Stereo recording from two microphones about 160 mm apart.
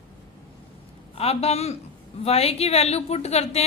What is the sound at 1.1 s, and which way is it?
A woman's voice, 40° left (ahead or behind).